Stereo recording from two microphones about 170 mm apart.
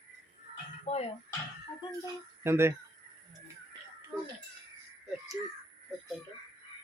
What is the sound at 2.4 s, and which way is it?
Speech, 15° right (ahead or behind).